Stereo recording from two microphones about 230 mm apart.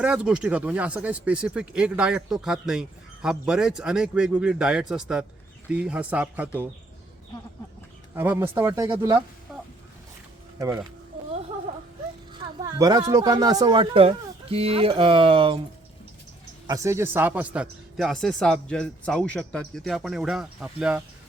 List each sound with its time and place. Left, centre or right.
0.0 s speech: centre
8.1 s speech: centre
9.5 s a sound: centre
10.6 s speech: centre
12.3 s speech: centre
16.6 s speech: centre